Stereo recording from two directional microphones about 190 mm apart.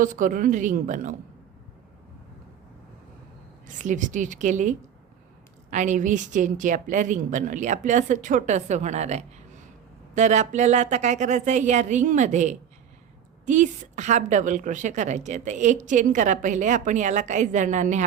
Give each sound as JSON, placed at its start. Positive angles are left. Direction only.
{"t": 0.0, "sound": "speech", "side_deg": -45}
{"t": 3.7, "sound": "a woman's voice", "side_deg": -40}